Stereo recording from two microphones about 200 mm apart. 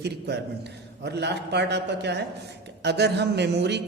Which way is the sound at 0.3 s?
55° right (ahead or behind).